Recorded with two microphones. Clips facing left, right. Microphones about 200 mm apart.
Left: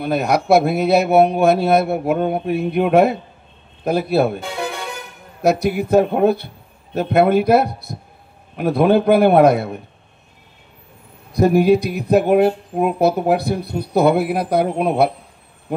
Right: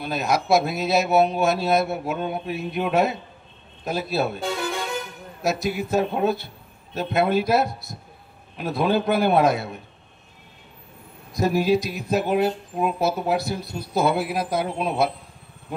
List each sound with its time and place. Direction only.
0.0 s speech: 60° left (ahead or behind)
11.3 s speech: 60° left (ahead or behind)